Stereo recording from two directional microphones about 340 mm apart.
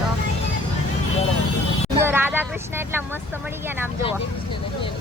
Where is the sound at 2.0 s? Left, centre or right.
Centre.